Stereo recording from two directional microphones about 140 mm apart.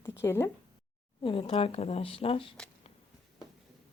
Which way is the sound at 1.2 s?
40° left (ahead or behind).